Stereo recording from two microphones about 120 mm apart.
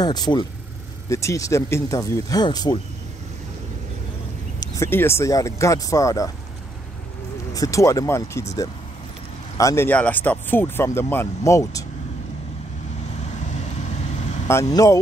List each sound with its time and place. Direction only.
0.0 s speech: 35° left (ahead or behind)
1.0 s speech: 25° left (ahead or behind)
4.6 s speech: 25° left (ahead or behind)
7.5 s speech: 25° left (ahead or behind)
9.6 s speech: 25° left (ahead or behind)
9.8 s speech: 15° left (ahead or behind)
13.2 s vehicle: 70° left (ahead or behind)
14.5 s speech: 25° left (ahead or behind)